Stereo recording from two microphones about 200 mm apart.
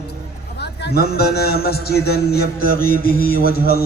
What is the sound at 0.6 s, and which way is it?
A man's voice, 55° left (ahead or behind).